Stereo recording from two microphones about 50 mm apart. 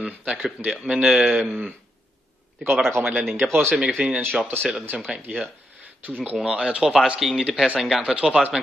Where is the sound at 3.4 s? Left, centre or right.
Right.